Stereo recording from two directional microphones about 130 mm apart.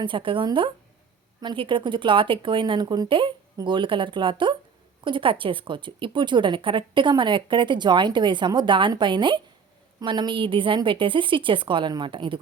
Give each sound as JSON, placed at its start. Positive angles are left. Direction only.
{"t": 0.0, "sound": "a woman's voice", "side_deg": -40}